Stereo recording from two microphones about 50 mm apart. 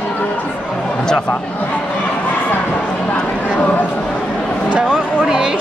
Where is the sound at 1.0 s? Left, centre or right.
Centre.